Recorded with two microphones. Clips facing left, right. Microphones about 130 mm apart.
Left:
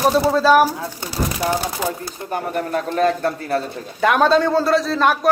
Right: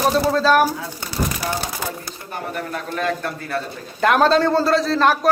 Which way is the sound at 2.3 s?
40° left (ahead or behind).